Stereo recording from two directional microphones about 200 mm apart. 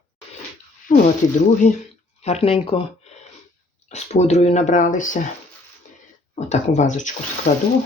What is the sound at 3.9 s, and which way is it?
Speech, 35° left (ahead or behind).